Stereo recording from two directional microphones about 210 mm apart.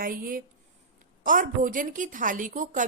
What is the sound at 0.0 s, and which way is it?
A woman's voice, 40° right (ahead or behind).